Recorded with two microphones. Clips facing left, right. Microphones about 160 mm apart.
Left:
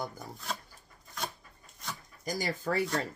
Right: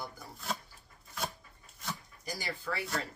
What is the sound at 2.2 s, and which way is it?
Speech, 45° left (ahead or behind).